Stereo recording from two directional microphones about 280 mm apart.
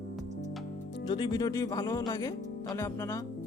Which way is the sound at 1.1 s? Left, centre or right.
Centre.